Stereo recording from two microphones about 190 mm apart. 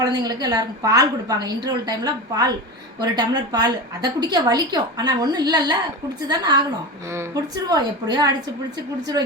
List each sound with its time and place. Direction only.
0.0 s a woman's voice: 20° right (ahead or behind)